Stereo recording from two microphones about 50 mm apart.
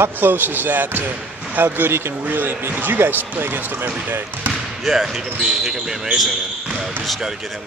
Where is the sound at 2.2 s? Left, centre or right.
Right.